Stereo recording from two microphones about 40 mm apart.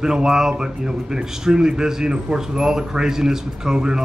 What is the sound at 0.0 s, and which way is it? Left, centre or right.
A man's voice, centre.